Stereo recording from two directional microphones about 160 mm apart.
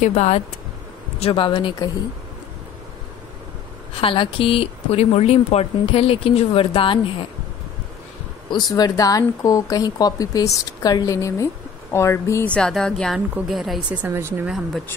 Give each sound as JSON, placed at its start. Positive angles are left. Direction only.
{"t": 0.0, "sound": "speech", "side_deg": 45}
{"t": 1.2, "sound": "speech", "side_deg": 30}
{"t": 4.0, "sound": "speech", "side_deg": 35}
{"t": 8.7, "sound": "speech", "side_deg": 25}
{"t": 12.5, "sound": "a woman's voice", "side_deg": 5}